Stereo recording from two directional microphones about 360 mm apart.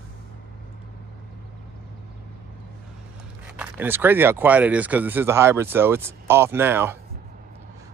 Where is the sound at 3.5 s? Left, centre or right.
Centre.